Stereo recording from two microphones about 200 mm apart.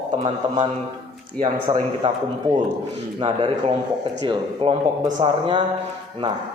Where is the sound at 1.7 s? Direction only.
20° right (ahead or behind).